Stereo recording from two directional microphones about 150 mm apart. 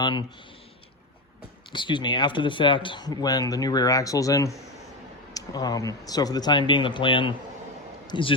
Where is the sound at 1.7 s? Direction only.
30° left (ahead or behind).